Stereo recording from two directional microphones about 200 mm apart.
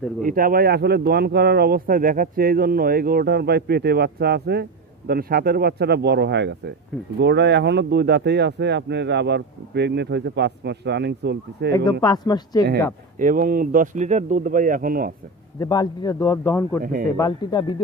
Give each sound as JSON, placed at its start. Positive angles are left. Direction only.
{"t": 0.2, "sound": "speech", "side_deg": -45}
{"t": 11.7, "sound": "a man's voice", "side_deg": 20}
{"t": 13.2, "sound": "speech", "side_deg": -45}
{"t": 15.6, "sound": "a man's voice", "side_deg": 20}
{"t": 16.8, "sound": "speech", "side_deg": -45}
{"t": 17.2, "sound": "speech", "side_deg": 20}